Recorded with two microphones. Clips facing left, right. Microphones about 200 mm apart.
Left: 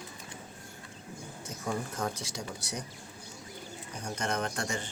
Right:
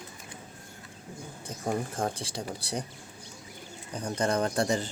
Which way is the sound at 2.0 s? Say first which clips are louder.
Right 3 dB; 30° right (ahead or behind).